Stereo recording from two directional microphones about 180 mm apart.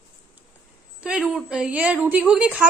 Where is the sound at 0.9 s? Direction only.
5° right (ahead or behind).